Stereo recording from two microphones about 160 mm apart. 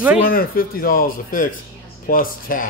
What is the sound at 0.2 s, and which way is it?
Speech, 65° left (ahead or behind).